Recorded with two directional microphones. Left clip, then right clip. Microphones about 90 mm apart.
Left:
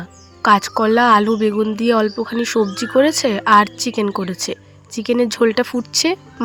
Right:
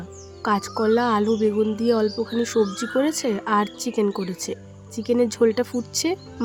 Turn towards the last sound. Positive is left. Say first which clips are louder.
# left 7 dB
turn(degrees=30)  # may be behind; listen again after turning